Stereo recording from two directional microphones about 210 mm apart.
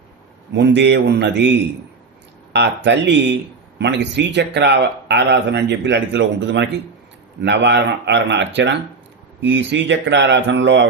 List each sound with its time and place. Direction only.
0.5 s speech: 55° right (ahead or behind)
2.5 s a man's voice: 55° right (ahead or behind)